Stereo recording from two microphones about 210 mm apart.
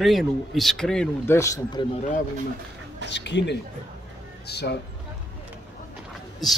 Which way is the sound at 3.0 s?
55° left (ahead or behind).